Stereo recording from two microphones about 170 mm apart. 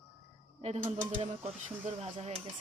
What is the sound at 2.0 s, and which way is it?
Speech, 40° right (ahead or behind).